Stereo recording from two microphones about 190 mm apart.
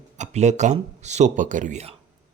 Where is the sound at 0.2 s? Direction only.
35° right (ahead or behind).